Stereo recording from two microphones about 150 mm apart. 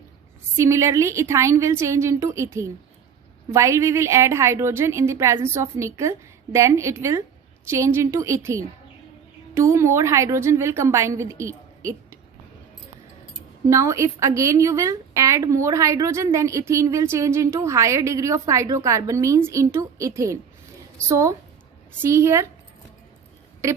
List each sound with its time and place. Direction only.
0.5 s a woman's voice: 20° right (ahead or behind)
13.7 s a woman's voice: 20° right (ahead or behind)